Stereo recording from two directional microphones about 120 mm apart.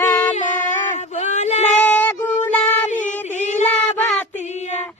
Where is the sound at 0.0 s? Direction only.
30° left (ahead or behind).